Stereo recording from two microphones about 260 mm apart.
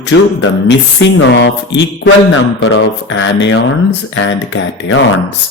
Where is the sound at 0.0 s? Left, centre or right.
Left.